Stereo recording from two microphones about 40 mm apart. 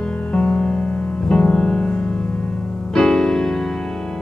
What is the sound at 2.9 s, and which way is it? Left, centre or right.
Music, centre.